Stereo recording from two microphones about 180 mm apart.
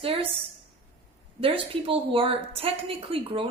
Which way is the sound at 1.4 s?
30° right (ahead or behind).